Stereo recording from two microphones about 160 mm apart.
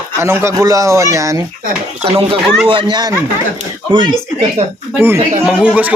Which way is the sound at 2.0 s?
40° right (ahead or behind).